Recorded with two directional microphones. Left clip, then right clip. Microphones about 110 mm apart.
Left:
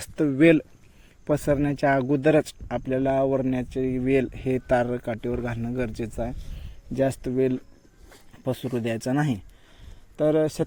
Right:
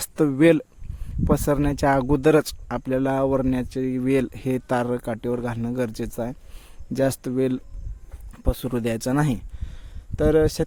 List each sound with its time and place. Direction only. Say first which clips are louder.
0.2 s speech: right 1 dB; 45° right (ahead or behind)
4.6 s speech: left 2 dB; 40° right (ahead or behind)
5.5 s speech: right 3 dB; 50° right (ahead or behind)
8.4 s speech: right 2 dB; 55° right (ahead or behind)
10.2 s speech: right 3 dB; 55° right (ahead or behind)